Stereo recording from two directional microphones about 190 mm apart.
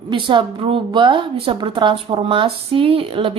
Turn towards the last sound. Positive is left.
turn(degrees=-30)  # may be behind; listen again after turning